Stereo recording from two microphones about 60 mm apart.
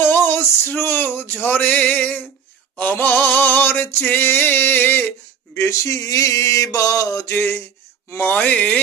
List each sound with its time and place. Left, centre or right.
0.0 s male singing: left
1.9 s a sound: left
5.5 s mantra: left
8.2 s speech: left